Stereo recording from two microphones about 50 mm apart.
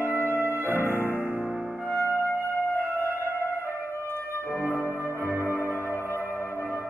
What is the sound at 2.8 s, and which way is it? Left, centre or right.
Music, right.